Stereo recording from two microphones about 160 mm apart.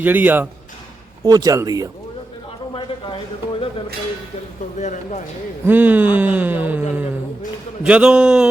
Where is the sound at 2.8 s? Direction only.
30° left (ahead or behind).